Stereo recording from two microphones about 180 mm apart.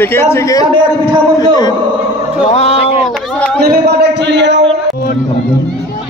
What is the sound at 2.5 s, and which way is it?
Speech, 35° left (ahead or behind).